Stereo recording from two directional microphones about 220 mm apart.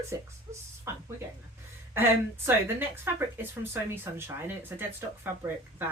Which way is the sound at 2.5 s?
10° right (ahead or behind).